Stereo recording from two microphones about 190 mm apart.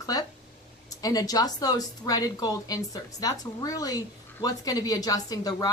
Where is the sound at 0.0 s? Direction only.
20° left (ahead or behind).